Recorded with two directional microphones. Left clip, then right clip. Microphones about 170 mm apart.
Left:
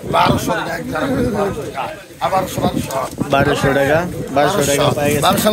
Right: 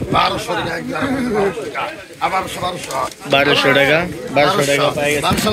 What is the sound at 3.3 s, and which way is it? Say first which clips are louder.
Speech: right 2 dB; 5° left (ahead or behind).